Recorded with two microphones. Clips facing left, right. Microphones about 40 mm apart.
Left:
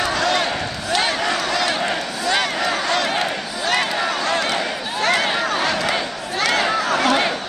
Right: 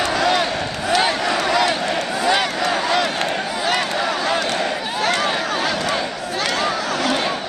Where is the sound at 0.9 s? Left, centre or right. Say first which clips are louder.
Right 1 dB; centre.